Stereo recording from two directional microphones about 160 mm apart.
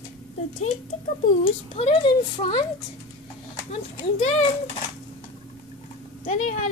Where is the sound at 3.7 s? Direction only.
50° left (ahead or behind).